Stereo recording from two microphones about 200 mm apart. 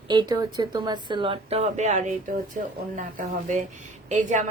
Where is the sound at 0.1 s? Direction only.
20° right (ahead or behind).